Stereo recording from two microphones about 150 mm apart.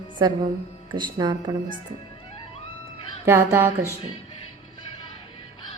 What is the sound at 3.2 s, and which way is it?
Speech, 20° right (ahead or behind).